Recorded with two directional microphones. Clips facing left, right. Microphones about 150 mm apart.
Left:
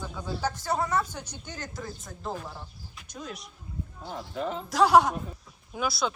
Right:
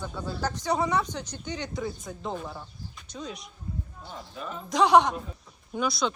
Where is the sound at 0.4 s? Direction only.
5° left (ahead or behind).